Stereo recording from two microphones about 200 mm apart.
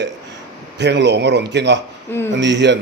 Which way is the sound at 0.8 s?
60° right (ahead or behind).